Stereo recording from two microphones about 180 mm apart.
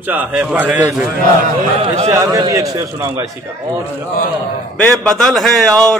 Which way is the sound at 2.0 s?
20° right (ahead or behind).